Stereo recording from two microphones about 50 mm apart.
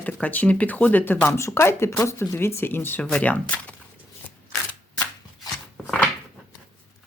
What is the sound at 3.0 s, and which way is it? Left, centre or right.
Speech, left.